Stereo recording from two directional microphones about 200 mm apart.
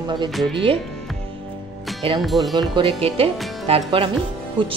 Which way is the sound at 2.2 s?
Centre (ahead or behind).